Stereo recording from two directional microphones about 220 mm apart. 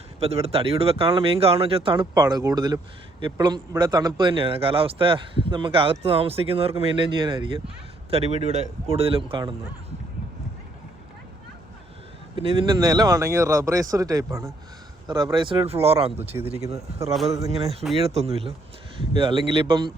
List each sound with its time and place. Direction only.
0.2 s speech: 30° right (ahead or behind)
12.4 s speech: 25° right (ahead or behind)
16.3 s speech: 15° right (ahead or behind)
16.7 s speech: 30° right (ahead or behind)